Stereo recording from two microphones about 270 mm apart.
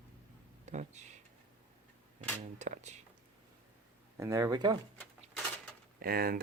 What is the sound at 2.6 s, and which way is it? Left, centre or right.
Speech, right.